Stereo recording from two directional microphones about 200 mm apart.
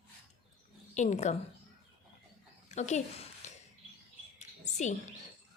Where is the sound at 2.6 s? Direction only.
35° left (ahead or behind).